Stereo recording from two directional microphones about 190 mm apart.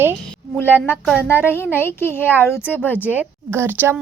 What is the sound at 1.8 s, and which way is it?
Speech, 10° left (ahead or behind).